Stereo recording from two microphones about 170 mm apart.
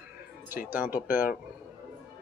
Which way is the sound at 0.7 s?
10° right (ahead or behind).